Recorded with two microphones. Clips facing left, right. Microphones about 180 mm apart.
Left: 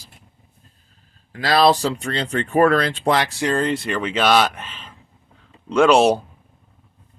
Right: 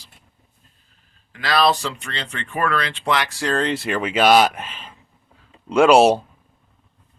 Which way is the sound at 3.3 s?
20° left (ahead or behind).